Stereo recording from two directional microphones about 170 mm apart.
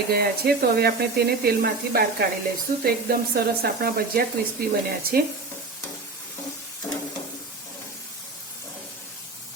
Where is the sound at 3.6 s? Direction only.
60° right (ahead or behind).